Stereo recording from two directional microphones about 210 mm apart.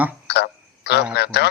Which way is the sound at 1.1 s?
50° left (ahead or behind).